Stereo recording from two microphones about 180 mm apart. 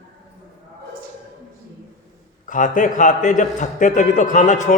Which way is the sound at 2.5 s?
45° left (ahead or behind).